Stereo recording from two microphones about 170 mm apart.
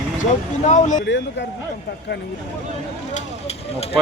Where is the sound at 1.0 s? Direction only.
90° left.